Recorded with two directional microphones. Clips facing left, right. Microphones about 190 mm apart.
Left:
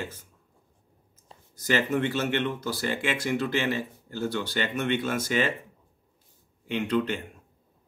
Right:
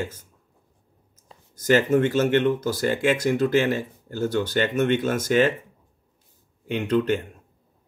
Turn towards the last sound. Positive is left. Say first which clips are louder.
# right 4 dB
turn(degrees=-45)  # may be behind; listen again after turning